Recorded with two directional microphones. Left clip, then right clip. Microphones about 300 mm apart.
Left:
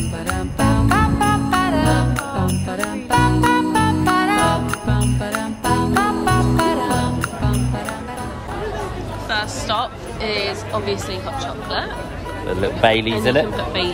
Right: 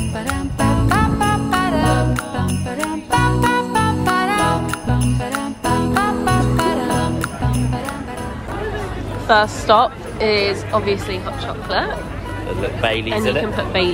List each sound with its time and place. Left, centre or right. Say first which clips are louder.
0.3 s music: even; centre
9.3 s a woman's voice: right 9 dB; centre
12.8 s speech: left 3 dB; left
13.6 s speech: right 3 dB; centre